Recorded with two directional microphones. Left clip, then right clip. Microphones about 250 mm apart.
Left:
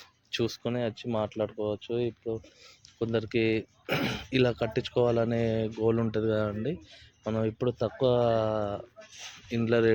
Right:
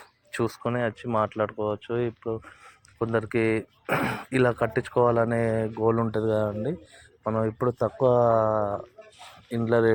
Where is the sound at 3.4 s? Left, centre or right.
Centre.